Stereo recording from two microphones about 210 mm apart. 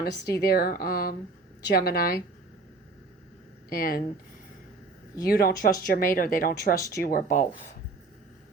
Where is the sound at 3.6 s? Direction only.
45° left (ahead or behind).